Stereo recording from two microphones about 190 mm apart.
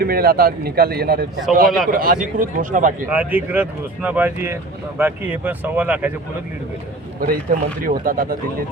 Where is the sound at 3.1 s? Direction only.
10° right (ahead or behind).